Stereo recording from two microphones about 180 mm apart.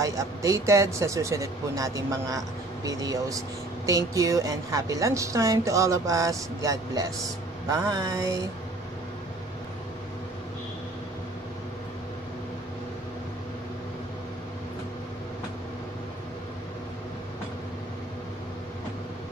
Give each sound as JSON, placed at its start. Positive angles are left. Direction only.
{"t": 0.0, "sound": "speech", "side_deg": -20}